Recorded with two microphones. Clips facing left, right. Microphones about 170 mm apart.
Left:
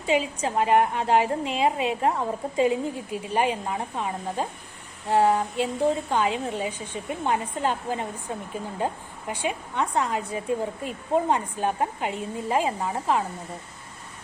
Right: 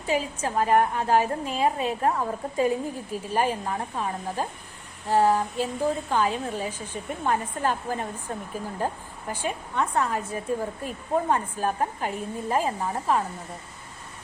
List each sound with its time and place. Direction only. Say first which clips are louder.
0.0 s a woman's voice: left 2 dB; 20° left (ahead or behind)
9.5 s a woman's voice: even; 15° left (ahead or behind)